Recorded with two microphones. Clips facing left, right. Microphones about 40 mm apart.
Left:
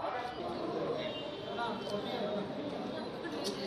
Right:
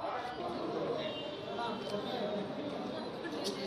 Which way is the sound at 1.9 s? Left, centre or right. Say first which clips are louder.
Even; left.